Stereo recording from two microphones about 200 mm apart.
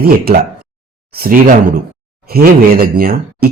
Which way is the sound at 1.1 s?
45° right (ahead or behind).